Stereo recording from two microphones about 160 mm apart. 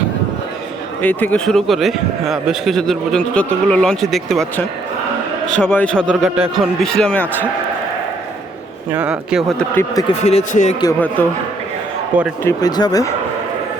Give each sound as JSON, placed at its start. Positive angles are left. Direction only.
{"t": 1.0, "sound": "a man's voice", "side_deg": 10}
{"t": 5.5, "sound": "a man's voice", "side_deg": 10}
{"t": 6.9, "sound": "a man's voice", "side_deg": 10}
{"t": 8.9, "sound": "a man's voice", "side_deg": -10}
{"t": 10.2, "sound": "speech", "side_deg": 45}
{"t": 12.1, "sound": "a man's voice", "side_deg": -10}
{"t": 12.5, "sound": "speech", "side_deg": 25}